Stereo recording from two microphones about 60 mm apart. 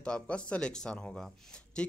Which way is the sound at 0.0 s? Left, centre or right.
Centre.